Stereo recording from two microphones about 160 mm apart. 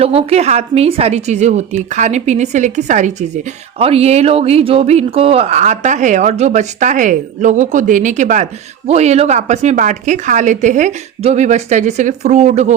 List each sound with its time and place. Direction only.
0.0 s a woman's voice: 40° right (ahead or behind)